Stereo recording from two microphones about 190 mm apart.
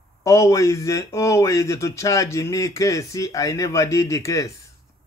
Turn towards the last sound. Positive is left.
turn(degrees=15)  # may be behind; listen again after turning